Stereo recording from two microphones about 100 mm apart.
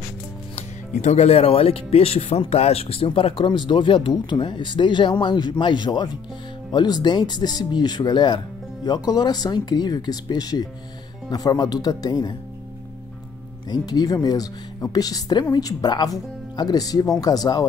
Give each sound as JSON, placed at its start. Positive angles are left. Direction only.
{"t": 1.1, "sound": "speech", "side_deg": 90}
{"t": 13.7, "sound": "speech", "side_deg": 45}